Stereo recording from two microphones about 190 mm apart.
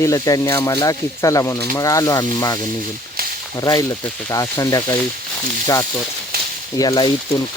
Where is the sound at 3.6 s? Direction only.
20° left (ahead or behind).